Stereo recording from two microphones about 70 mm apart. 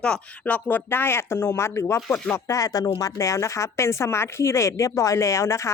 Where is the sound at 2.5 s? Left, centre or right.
Left.